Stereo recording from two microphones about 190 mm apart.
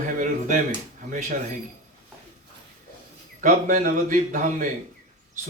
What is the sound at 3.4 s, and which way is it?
Speech, 45° right (ahead or behind).